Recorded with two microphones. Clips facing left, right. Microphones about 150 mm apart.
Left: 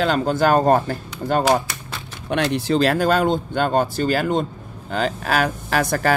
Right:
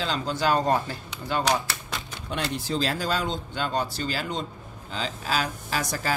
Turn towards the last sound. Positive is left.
turn(degrees=60)  # may be behind; listen again after turning